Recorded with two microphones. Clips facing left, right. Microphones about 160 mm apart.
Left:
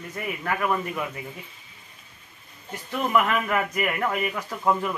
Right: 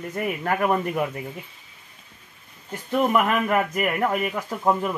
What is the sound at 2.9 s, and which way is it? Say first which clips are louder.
A man's voice: right 3 dB; 40° right (ahead or behind).